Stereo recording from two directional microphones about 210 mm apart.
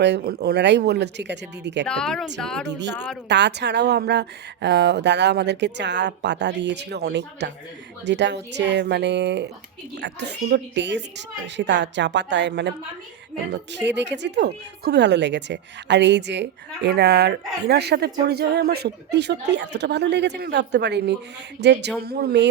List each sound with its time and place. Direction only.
0.0 s speech: 50° right (ahead or behind)
1.9 s speech: 5° left (ahead or behind)
2.6 s speech: 55° right (ahead or behind)